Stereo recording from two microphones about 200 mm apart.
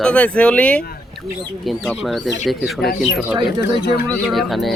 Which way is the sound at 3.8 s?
50° left (ahead or behind).